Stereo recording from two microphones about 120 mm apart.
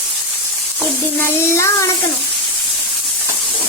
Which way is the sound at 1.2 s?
20° left (ahead or behind).